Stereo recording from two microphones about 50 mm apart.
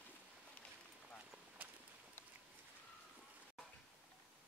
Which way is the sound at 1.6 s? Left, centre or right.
Right.